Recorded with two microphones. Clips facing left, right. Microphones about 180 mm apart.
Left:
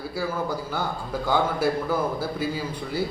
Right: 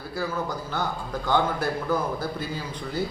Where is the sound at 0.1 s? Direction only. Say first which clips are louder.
Even; 10° left (ahead or behind).